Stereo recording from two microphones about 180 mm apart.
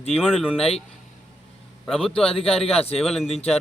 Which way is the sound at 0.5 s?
35° left (ahead or behind).